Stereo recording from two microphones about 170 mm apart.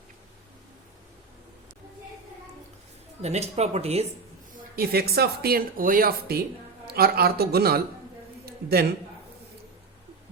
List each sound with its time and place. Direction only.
3.2 s speech: 40° right (ahead or behind)
4.7 s a man's voice: 65° right (ahead or behind)